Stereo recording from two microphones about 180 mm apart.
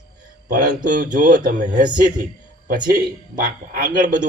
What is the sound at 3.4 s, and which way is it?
Speech, 50° right (ahead or behind).